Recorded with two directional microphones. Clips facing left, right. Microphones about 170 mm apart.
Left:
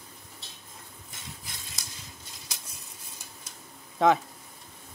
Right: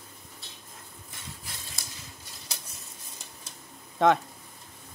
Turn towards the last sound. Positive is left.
turn(degrees=0)  # may be behind; listen again after turning